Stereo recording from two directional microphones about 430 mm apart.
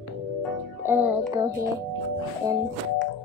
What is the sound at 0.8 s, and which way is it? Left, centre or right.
Child singing, centre.